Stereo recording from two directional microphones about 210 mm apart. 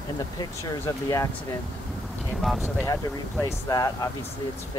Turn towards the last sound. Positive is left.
turn(degrees=15)  # may be behind; listen again after turning